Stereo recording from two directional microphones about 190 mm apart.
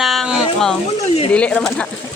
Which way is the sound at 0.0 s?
Centre (ahead or behind).